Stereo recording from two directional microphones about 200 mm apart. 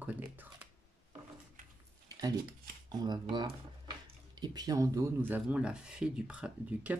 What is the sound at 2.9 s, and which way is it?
Speech, 20° right (ahead or behind).